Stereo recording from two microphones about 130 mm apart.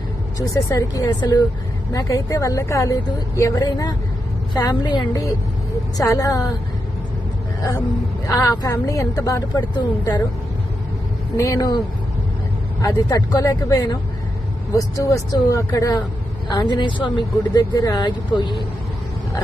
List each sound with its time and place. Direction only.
0.3 s a woman's voice: 25° left (ahead or behind)
8.3 s a woman's voice: 25° left (ahead or behind)
11.3 s a woman's voice: 25° left (ahead or behind)
12.8 s a woman's voice: 25° left (ahead or behind)